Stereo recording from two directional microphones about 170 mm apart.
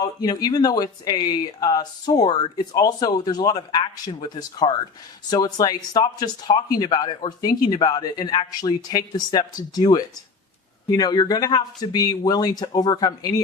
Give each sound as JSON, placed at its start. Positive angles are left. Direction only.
{"t": 0.0, "sound": "speech", "side_deg": 20}